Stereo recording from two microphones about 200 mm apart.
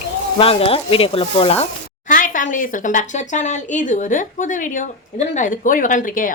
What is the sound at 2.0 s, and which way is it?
Speech, 40° left (ahead or behind).